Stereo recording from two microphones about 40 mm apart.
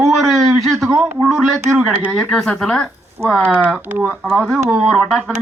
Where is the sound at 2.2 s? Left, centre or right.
Centre.